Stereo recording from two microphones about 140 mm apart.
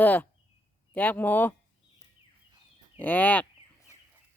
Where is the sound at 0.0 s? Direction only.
10° left (ahead or behind).